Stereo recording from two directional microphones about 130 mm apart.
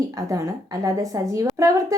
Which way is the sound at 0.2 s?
25° right (ahead or behind).